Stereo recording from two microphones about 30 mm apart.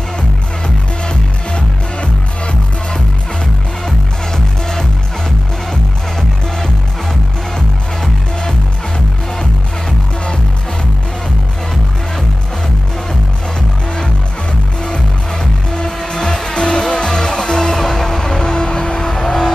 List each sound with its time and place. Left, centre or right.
1.0 s music: left
15.7 s music: left